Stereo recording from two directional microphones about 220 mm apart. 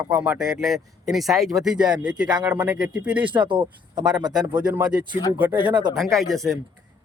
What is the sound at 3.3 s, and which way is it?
Speech, 20° right (ahead or behind).